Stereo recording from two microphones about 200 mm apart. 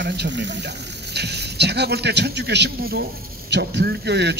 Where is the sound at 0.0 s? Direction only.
60° right (ahead or behind).